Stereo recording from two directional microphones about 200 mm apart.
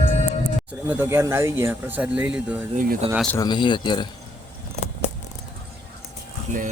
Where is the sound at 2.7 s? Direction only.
40° right (ahead or behind).